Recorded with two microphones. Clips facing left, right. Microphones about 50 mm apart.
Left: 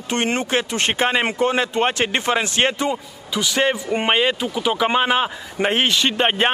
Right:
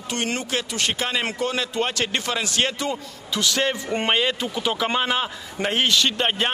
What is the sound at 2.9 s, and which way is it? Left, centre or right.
A man's voice, centre.